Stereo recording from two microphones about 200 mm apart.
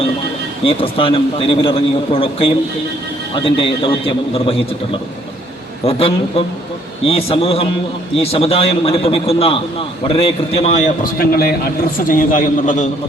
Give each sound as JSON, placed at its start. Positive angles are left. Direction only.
{"t": 0.6, "sound": "a man's voice", "side_deg": 25}
{"t": 5.8, "sound": "a man's voice", "side_deg": 30}
{"t": 11.0, "sound": "a man's voice", "side_deg": 50}